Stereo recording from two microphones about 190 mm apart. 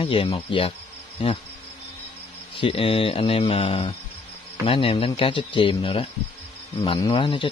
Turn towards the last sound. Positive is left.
turn(degrees=25)  # may be behind; listen again after turning